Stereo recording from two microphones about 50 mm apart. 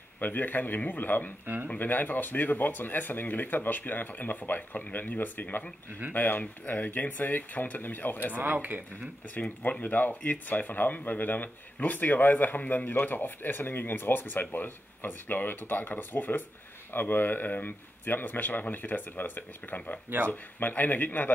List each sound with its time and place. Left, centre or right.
0.2 s speech: left
1.4 s speech: right
1.8 s speech: left
8.3 s speech: right
9.6 s speech: left